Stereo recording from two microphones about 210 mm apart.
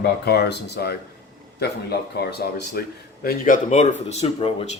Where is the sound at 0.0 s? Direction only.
50° left (ahead or behind).